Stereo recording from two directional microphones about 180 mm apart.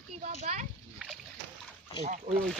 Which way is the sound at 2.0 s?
40° right (ahead or behind).